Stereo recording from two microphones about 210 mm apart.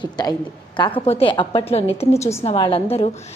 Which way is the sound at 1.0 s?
30° left (ahead or behind).